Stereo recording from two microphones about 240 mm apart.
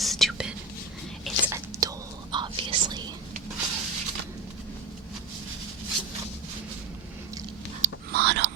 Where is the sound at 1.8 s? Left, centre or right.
Centre.